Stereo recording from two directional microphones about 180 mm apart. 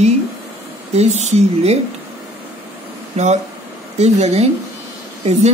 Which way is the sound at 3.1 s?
40° right (ahead or behind).